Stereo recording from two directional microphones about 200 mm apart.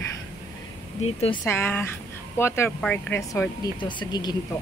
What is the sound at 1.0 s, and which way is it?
Speech, 30° left (ahead or behind).